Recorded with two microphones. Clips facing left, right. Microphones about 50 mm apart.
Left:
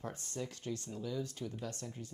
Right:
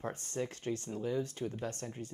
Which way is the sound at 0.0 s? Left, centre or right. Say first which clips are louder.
Right 4 dB; right.